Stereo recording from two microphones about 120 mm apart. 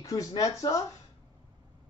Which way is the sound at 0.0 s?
30° left (ahead or behind).